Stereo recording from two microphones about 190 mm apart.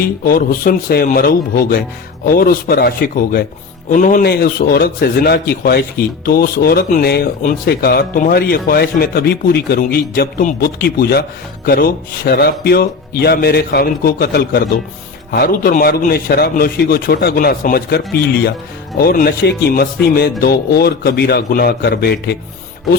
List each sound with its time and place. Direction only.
0.0 s a man's voice: 50° left (ahead or behind)